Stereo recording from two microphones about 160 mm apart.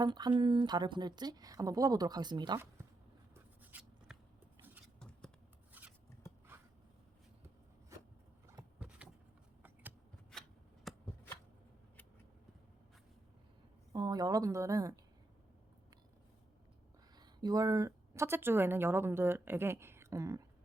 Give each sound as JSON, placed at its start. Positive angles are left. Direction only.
{"t": 0.0, "sound": "a woman's voice", "side_deg": -25}
{"t": 3.3, "sound": "a sound", "side_deg": -10}
{"t": 5.7, "sound": "scissors", "side_deg": -10}
{"t": 8.8, "sound": "vehicle", "side_deg": -5}
{"t": 10.3, "sound": "scissors", "side_deg": 5}
{"t": 10.9, "sound": "shuffling cards", "side_deg": 0}
{"t": 13.9, "sound": "a woman's voice", "side_deg": -25}
{"t": 17.2, "sound": "speech", "side_deg": -25}